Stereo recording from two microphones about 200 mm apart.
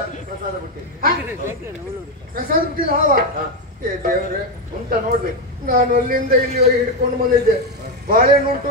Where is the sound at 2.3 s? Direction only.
45° right (ahead or behind).